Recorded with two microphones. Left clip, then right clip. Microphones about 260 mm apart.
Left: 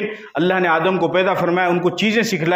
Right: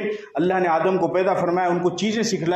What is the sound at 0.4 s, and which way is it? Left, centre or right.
A man's voice, left.